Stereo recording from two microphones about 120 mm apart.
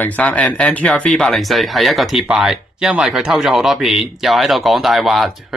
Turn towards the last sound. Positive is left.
turn(degrees=0)  # may be behind; listen again after turning